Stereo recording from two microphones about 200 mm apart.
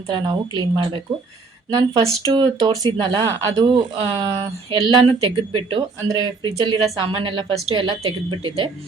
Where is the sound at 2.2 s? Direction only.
25° right (ahead or behind).